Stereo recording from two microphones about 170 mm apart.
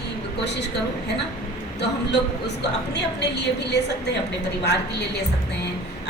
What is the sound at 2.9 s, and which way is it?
A woman's voice, 90° left.